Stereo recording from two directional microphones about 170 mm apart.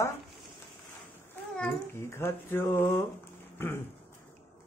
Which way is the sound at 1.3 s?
10° left (ahead or behind).